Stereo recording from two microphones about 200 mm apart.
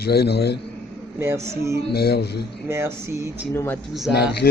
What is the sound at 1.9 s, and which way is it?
Speech, 55° left (ahead or behind).